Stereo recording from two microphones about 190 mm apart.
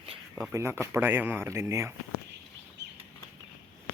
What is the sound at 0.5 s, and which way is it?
Speech, 15° right (ahead or behind).